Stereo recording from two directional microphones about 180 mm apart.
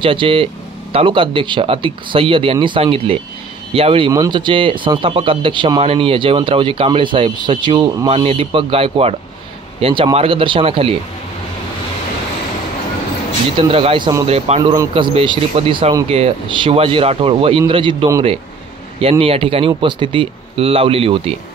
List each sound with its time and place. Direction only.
0.0 s speech: 30° right (ahead or behind)
13.6 s speech: 30° right (ahead or behind)